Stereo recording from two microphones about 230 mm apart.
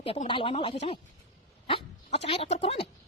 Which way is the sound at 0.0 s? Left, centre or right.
Left.